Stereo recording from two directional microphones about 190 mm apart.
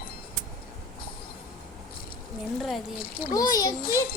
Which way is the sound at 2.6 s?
Centre (ahead or behind).